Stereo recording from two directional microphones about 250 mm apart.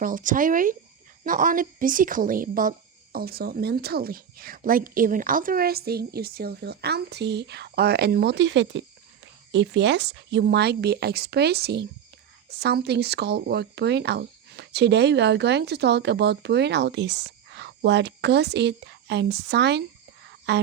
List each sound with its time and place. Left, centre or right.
0.0 s a woman's voice: right